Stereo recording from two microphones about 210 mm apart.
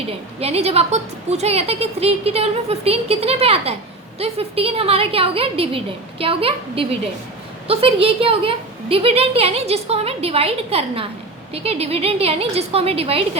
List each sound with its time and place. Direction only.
0.3 s a woman's voice: 30° right (ahead or behind)